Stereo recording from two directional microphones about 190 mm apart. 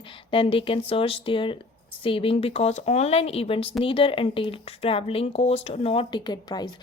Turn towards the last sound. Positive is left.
turn(degrees=20)  # may be behind; listen again after turning